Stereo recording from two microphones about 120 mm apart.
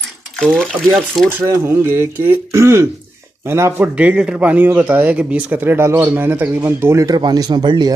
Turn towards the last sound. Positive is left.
turn(degrees=-35)  # may be behind; listen again after turning